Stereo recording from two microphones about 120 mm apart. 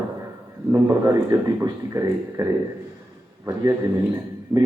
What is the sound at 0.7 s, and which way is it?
Speech, 25° right (ahead or behind).